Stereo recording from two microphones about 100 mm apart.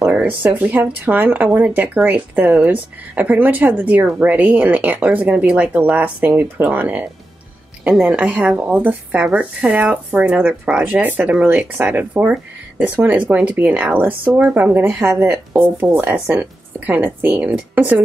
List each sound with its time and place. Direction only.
0.0 s a woman's voice: 15° right (ahead or behind)